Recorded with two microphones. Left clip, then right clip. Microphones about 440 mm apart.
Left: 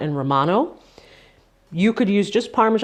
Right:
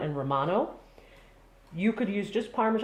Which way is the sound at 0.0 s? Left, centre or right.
Left.